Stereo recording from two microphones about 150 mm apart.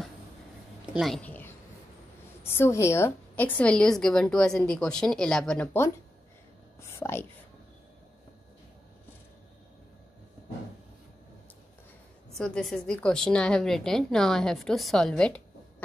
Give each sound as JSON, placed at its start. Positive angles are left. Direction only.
{"t": 0.9, "sound": "a woman's voice", "side_deg": 0}
{"t": 12.4, "sound": "a woman's voice", "side_deg": 5}